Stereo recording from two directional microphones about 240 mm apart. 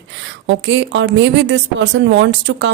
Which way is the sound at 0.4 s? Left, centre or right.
Right.